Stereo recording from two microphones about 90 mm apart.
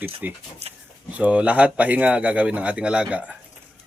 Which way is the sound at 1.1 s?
15° right (ahead or behind).